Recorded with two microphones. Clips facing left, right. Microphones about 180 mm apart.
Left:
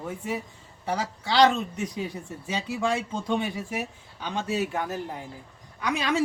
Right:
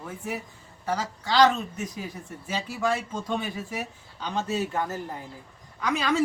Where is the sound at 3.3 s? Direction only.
15° left (ahead or behind).